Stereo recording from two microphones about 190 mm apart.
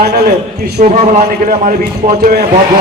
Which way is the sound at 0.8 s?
40° right (ahead or behind).